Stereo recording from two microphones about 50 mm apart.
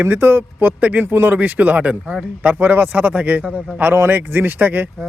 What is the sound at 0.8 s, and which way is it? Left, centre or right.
Speech, right.